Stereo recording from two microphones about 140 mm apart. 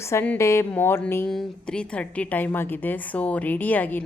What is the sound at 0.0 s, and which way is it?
A woman's voice, 20° left (ahead or behind).